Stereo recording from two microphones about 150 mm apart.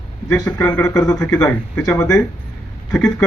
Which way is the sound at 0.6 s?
10° left (ahead or behind).